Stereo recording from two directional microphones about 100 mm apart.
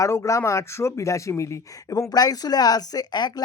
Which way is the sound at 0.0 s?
30° left (ahead or behind).